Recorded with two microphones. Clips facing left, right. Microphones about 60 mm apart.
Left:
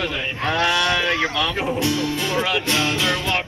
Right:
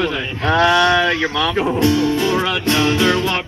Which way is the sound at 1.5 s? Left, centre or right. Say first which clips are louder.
Right 5 dB; right.